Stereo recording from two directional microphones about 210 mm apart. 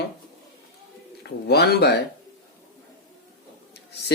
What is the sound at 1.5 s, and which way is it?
Speech, 50° left (ahead or behind).